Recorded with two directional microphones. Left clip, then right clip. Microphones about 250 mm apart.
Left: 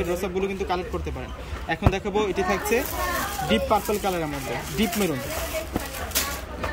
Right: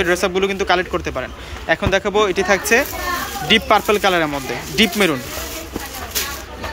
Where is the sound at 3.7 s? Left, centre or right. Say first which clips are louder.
Right 9 dB; right.